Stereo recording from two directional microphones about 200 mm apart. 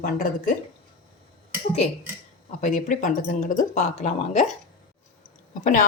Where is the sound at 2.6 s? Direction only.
40° left (ahead or behind).